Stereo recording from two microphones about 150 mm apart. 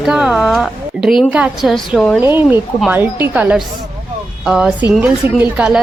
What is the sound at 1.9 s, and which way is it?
Speech, 5° left (ahead or behind).